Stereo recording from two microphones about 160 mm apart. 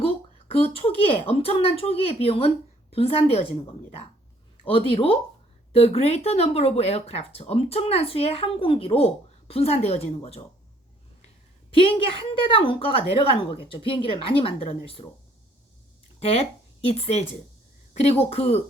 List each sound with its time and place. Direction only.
0.5 s speech: 35° left (ahead or behind)
4.9 s speech: 35° left (ahead or behind)
11.7 s speech: 35° left (ahead or behind)
16.2 s speech: 40° left (ahead or behind)